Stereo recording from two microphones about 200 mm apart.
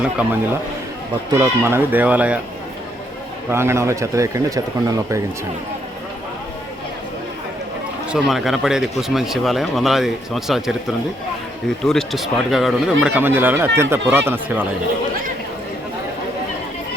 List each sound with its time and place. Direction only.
0.0 s a man's voice: 5° right (ahead or behind)
1.4 s a man's voice: 10° right (ahead or behind)
3.5 s a man's voice: 10° right (ahead or behind)
8.1 s a man's voice: centre (ahead or behind)